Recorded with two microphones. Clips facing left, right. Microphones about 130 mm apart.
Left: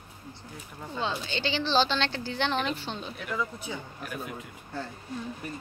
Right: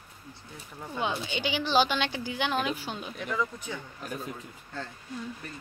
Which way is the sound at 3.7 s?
15° left (ahead or behind).